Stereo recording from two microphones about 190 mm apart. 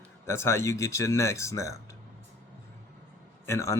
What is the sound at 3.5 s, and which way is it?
Speech, 15° left (ahead or behind).